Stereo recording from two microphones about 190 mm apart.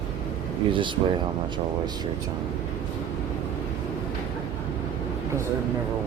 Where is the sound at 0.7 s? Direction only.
25° right (ahead or behind).